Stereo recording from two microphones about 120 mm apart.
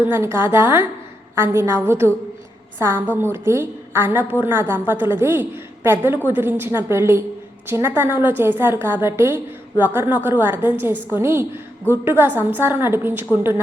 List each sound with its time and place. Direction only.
0.0 s a woman's voice: 20° right (ahead or behind)